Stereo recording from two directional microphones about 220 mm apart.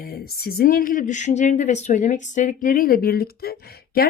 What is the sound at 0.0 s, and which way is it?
Speech, 45° left (ahead or behind).